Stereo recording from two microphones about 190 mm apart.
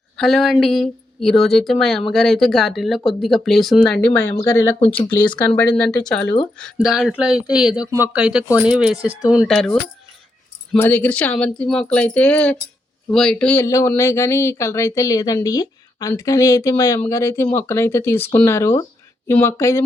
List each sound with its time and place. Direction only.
0.2 s speech: centre (ahead or behind)
4.8 s speech: 25° left (ahead or behind)
5.4 s speech: 5° left (ahead or behind)
10.8 s speech: 10° left (ahead or behind)